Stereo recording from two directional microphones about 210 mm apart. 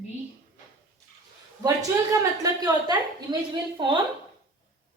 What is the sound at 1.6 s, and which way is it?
A woman's voice, 15° right (ahead or behind).